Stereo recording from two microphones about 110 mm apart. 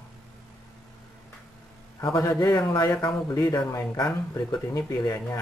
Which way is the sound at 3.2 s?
30° left (ahead or behind).